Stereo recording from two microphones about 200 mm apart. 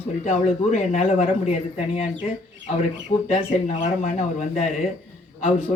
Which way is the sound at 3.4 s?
35° left (ahead or behind).